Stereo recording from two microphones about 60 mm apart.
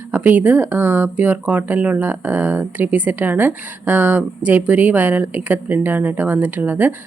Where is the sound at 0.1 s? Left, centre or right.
Right.